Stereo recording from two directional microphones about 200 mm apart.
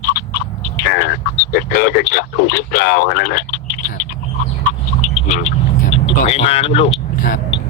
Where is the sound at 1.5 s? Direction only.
50° left (ahead or behind).